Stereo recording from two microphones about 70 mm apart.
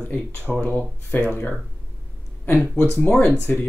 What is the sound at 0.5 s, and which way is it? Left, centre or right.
Speech, centre.